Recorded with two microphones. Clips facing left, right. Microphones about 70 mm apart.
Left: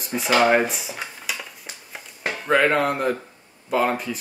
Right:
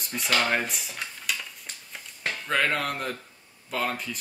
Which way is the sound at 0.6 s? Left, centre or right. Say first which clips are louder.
Left 5 dB; centre.